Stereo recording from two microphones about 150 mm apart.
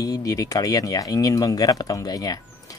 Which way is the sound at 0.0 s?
25° left (ahead or behind).